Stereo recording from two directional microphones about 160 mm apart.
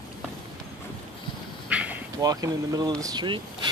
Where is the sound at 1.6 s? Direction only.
10° right (ahead or behind).